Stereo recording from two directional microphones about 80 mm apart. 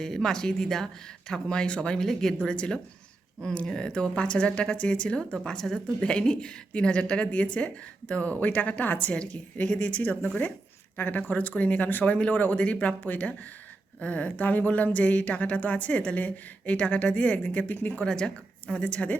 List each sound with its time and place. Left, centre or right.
0.0 s speech: centre